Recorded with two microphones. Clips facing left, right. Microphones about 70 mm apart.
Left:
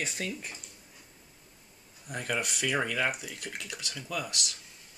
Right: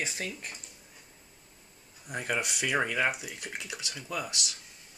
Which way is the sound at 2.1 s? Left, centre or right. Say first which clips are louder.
Right 1 dB; centre.